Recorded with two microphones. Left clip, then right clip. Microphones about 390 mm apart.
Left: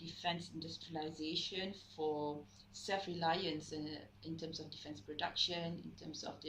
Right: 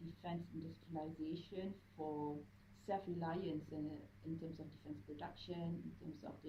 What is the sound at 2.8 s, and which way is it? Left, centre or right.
Speech, left.